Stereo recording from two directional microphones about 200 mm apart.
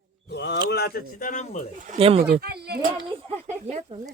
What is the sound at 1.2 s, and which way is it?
Speech, 35° left (ahead or behind).